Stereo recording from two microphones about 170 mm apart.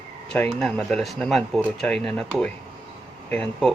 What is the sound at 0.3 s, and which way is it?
Speech, 5° left (ahead or behind).